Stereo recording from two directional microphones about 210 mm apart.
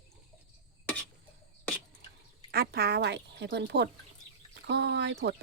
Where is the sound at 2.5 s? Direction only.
45° right (ahead or behind).